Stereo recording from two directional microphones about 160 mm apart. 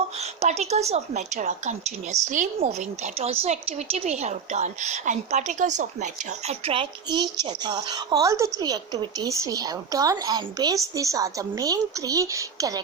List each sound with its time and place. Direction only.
0.2 s a woman's voice: 40° right (ahead or behind); by 12.8 s 20° right (ahead or behind)